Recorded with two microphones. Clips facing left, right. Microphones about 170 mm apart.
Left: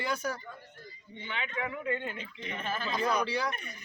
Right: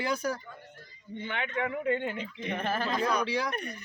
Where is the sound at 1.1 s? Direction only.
50° right (ahead or behind).